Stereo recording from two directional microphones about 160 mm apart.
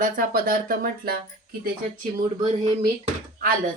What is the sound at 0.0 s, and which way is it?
Speech, 60° right (ahead or behind).